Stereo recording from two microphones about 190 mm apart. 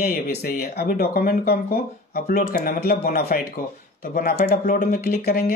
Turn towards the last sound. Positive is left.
turn(degrees=50)  # may be behind; listen again after turning